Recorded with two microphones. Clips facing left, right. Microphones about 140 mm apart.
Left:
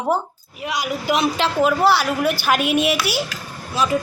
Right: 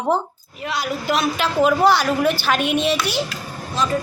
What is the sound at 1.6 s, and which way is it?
Speech, 5° left (ahead or behind).